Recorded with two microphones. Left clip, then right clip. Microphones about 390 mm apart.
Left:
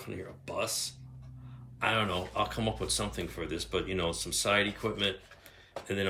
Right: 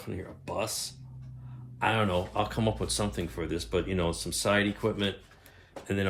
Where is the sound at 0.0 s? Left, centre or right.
Centre.